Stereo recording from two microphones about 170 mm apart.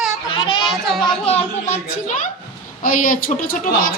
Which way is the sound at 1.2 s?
40° left (ahead or behind).